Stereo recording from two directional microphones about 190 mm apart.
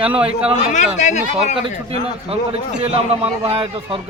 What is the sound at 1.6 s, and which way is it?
A man's voice, 30° right (ahead or behind).